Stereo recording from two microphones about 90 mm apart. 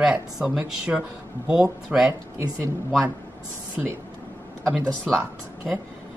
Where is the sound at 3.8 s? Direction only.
5° right (ahead or behind).